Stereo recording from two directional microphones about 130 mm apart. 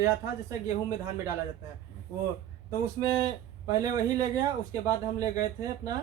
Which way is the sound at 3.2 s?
25° right (ahead or behind).